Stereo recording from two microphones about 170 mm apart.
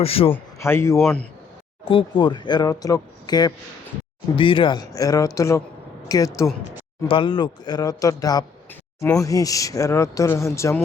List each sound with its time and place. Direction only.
0.0 s a man's voice: 35° left (ahead or behind)
0.3 s a man's voice: 15° left (ahead or behind)
0.9 s speech: centre (ahead or behind)
1.8 s speech: 30° left (ahead or behind)
7.1 s speech: 30° left (ahead or behind)
9.0 s speech: 10° left (ahead or behind)
9.2 s speech: 20° left (ahead or behind)